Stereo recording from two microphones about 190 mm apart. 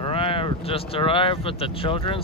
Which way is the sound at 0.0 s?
30° left (ahead or behind).